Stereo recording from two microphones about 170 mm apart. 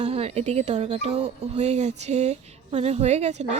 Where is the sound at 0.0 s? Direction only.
35° right (ahead or behind).